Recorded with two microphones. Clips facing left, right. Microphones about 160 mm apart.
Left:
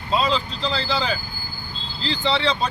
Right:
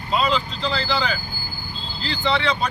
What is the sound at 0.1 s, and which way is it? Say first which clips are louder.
Speech: even; 30° left (ahead or behind).